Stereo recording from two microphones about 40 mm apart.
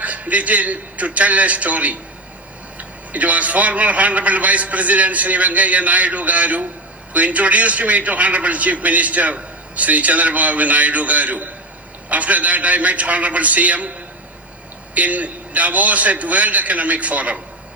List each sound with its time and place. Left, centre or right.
0.0 s a man's voice: right
14.9 s a man's voice: right